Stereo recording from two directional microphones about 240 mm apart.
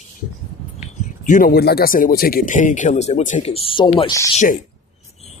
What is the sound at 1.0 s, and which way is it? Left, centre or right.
Speech, left.